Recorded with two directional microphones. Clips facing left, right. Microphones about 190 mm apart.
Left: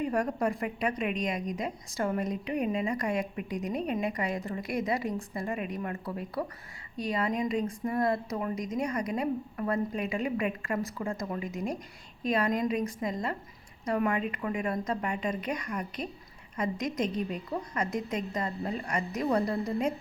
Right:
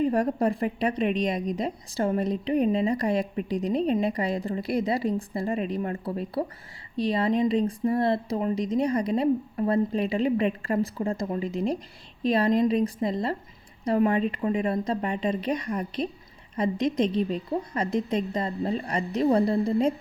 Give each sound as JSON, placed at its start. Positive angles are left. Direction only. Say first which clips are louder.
{"t": 0.0, "sound": "a woman's voice", "louder": "right 5 dB", "side_deg": -30}